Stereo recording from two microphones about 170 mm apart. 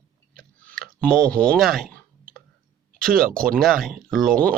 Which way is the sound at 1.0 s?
5° left (ahead or behind).